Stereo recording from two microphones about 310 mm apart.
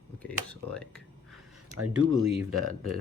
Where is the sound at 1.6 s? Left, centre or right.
Right.